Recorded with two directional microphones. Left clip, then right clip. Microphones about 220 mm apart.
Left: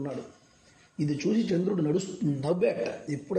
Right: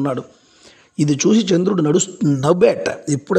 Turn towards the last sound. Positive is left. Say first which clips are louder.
# right 12 dB
turn(degrees=-50)  # may be behind; listen again after turning